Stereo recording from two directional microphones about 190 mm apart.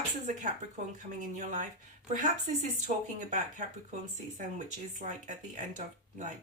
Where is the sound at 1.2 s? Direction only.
40° right (ahead or behind).